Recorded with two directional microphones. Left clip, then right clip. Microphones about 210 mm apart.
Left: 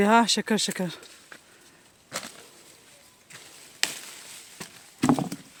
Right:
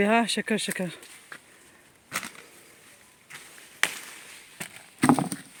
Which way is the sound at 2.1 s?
50° right (ahead or behind).